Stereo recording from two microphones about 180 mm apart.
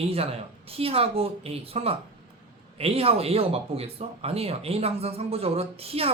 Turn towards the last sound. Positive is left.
turn(degrees=-35)  # may be behind; listen again after turning